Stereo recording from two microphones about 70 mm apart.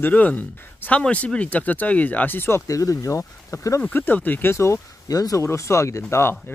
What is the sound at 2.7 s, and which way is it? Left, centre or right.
Speech, left.